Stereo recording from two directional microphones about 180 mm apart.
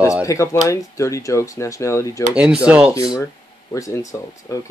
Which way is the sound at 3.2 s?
15° left (ahead or behind).